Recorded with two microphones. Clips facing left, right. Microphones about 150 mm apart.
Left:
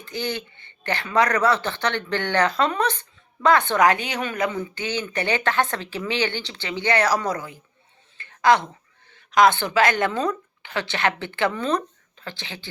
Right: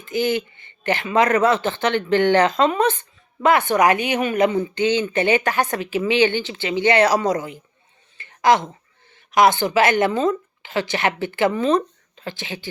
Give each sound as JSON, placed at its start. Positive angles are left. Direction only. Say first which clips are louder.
{"t": 0.0, "sound": "speech", "louder": "right 8 dB", "side_deg": -15}
{"t": 8.2, "sound": "a sound", "louder": "right 1 dB", "side_deg": -15}
{"t": 9.4, "sound": "speech", "louder": "right 2 dB", "side_deg": -15}